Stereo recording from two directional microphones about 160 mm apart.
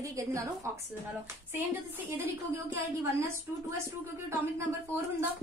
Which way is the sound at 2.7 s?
15° right (ahead or behind).